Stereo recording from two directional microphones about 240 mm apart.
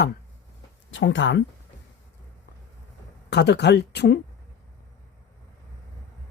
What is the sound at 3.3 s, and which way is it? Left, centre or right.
Speech, left.